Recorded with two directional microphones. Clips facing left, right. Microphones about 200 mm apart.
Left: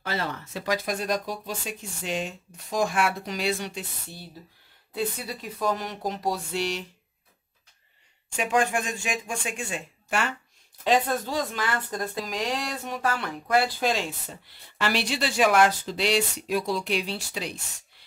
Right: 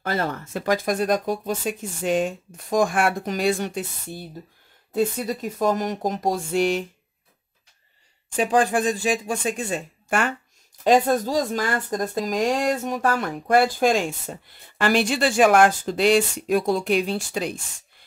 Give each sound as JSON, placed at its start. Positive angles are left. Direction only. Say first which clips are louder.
{"t": 0.0, "sound": "speech", "louder": "right 5 dB", "side_deg": -45}
{"t": 8.4, "sound": "speech", "louder": "right 5 dB", "side_deg": -35}